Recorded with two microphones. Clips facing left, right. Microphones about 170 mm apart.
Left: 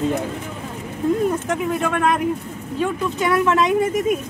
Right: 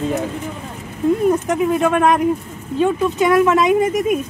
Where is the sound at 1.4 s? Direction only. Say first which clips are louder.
Right 5 dB; 20° right (ahead or behind).